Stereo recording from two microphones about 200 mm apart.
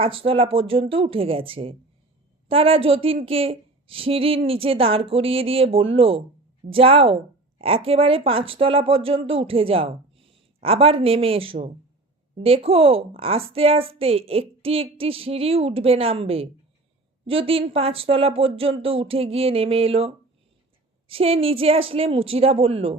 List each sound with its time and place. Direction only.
0.0 s speech: 30° right (ahead or behind)